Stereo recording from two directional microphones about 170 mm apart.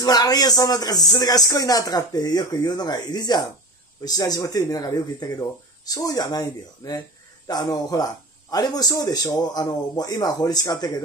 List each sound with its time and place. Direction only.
0.0 s speech: 20° left (ahead or behind)